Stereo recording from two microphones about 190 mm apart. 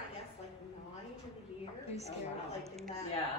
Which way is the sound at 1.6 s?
35° left (ahead or behind).